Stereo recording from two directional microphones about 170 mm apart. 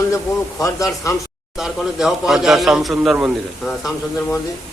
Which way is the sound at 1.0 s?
20° left (ahead or behind).